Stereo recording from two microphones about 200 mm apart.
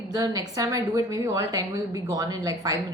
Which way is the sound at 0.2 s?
15° right (ahead or behind).